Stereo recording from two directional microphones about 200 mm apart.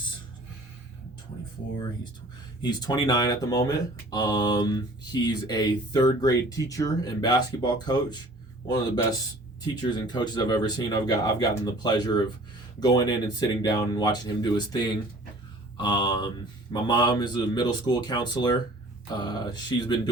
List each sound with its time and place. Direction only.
2.6 s speech: 20° left (ahead or behind)